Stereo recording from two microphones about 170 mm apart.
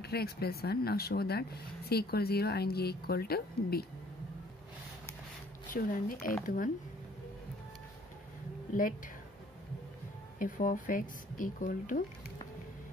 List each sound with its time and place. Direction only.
0.0 s speech: 70° left (ahead or behind)
5.7 s speech: 55° left (ahead or behind)
10.4 s speech: 50° left (ahead or behind)